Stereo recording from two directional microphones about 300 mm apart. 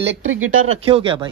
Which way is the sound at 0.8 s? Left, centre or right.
Centre.